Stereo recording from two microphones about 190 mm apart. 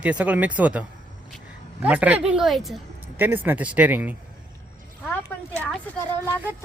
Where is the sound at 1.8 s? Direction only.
5° right (ahead or behind).